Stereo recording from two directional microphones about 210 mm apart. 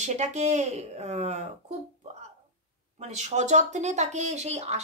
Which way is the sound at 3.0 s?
35° right (ahead or behind).